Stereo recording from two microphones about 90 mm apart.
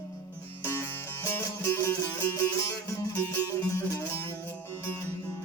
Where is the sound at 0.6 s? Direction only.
25° left (ahead or behind).